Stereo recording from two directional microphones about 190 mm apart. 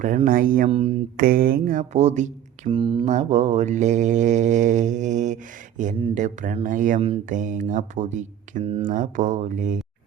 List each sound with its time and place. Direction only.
0.3 s speech: 45° right (ahead or behind)
0.7 s mantra: 35° right (ahead or behind)
1.1 s speech: 50° right (ahead or behind)
2.6 s mantra: 25° right (ahead or behind)